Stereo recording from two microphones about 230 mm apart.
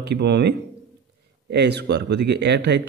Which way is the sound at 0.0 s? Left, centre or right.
Right.